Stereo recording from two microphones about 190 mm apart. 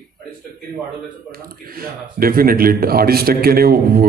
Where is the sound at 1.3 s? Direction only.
50° right (ahead or behind).